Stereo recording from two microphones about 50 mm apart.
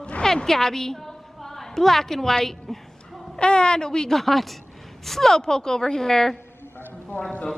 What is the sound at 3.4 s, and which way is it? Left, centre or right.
Speech, centre.